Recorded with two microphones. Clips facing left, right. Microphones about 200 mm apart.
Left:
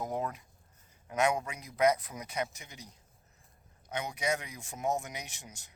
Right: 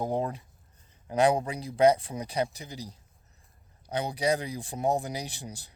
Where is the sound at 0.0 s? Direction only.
30° right (ahead or behind).